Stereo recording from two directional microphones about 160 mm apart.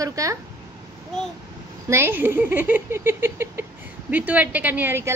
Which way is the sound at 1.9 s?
15° right (ahead or behind).